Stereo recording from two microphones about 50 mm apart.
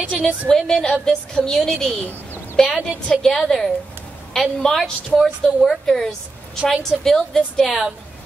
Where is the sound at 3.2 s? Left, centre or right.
Centre.